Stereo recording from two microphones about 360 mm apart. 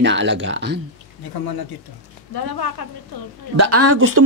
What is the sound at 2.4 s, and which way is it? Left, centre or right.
Speech, left.